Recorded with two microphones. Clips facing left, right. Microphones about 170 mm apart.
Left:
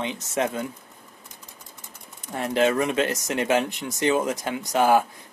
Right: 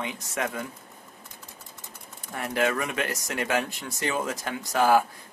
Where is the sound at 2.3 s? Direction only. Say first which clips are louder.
Left 5 dB; 20° left (ahead or behind).